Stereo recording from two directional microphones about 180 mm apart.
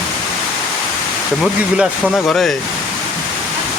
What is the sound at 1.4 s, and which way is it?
Speech, centre (ahead or behind).